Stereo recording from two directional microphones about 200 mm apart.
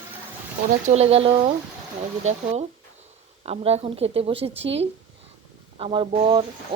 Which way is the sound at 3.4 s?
30° right (ahead or behind).